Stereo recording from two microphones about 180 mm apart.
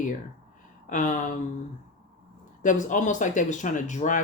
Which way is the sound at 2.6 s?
45° left (ahead or behind).